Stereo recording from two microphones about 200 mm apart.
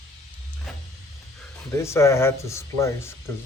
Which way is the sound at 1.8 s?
15° left (ahead or behind).